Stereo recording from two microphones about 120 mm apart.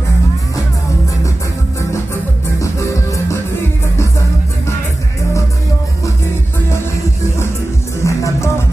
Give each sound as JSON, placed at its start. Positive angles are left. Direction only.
{"t": 2.6, "sound": "music", "side_deg": 25}
{"t": 8.0, "sound": "music", "side_deg": 25}